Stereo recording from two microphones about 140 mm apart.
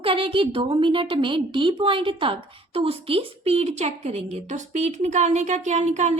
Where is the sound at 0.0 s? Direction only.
40° right (ahead or behind).